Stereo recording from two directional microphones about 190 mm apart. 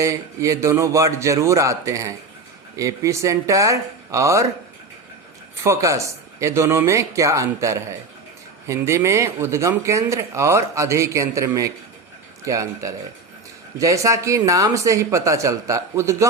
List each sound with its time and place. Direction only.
0.0 s speech: 15° right (ahead or behind)
5.6 s speech: 15° right (ahead or behind)